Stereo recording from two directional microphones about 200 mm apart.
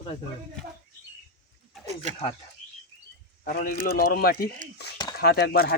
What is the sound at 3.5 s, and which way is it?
Speech, 45° left (ahead or behind).